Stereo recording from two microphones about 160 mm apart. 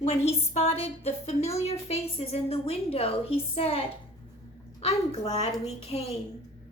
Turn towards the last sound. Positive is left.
turn(degrees=40)  # may be behind; listen again after turning